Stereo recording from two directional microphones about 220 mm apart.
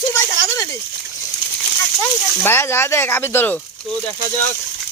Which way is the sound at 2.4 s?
10° left (ahead or behind).